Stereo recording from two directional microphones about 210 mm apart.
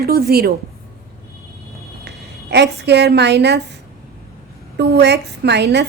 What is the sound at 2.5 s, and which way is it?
A woman's voice, 55° right (ahead or behind).